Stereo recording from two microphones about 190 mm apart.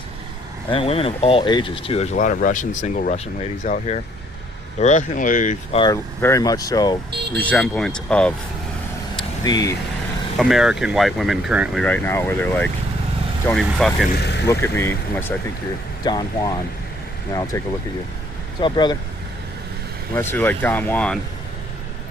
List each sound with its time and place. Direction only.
0.7 s speech: 30° left (ahead or behind)
2.1 s speech: 45° left (ahead or behind)
5.8 s speech: 20° left (ahead or behind)
7.3 s speech: 5° left (ahead or behind)
9.4 s speech: 20° left (ahead or behind)
10.3 s speech: centre (ahead or behind)
14.1 s speech: 60° left (ahead or behind)
14.4 s speech: 15° left (ahead or behind)
20.1 s speech: 10° left (ahead or behind)